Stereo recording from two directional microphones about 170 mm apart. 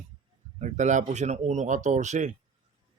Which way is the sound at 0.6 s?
45° right (ahead or behind).